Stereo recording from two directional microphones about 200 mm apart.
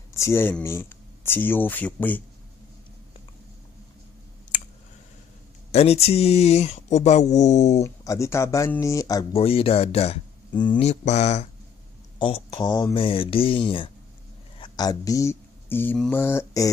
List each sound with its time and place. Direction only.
0.1 s speech: 15° left (ahead or behind)
5.7 s speech: 30° left (ahead or behind)
7.8 s speech: 15° left (ahead or behind)
9.4 s speech: 30° left (ahead or behind)